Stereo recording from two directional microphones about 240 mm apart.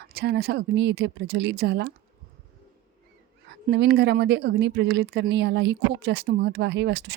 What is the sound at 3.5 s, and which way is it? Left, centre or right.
Speech, right.